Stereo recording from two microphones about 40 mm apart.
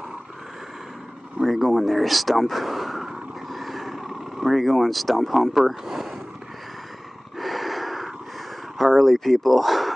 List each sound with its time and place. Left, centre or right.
1.4 s speech: centre
3.5 s vehicle: centre
7.3 s a sound: centre
8.7 s speech: centre